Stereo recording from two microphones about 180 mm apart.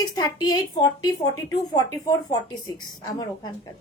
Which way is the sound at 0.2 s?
20° left (ahead or behind).